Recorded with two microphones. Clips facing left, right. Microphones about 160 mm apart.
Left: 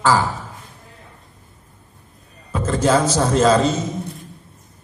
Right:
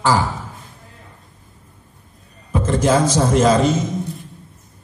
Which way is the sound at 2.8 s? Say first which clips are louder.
Even; 15° right (ahead or behind).